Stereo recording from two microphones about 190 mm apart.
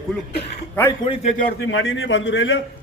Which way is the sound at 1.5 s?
70° left (ahead or behind).